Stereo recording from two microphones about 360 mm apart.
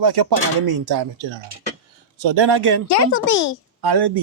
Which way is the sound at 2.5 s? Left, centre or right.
Right.